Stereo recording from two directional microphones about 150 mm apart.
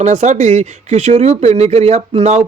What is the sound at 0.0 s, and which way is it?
Speech, 50° right (ahead or behind).